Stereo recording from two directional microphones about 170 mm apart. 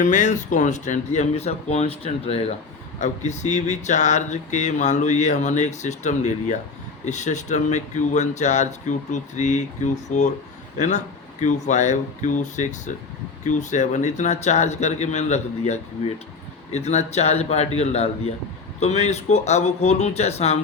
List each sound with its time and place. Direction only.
0.0 s speech: 45° left (ahead or behind)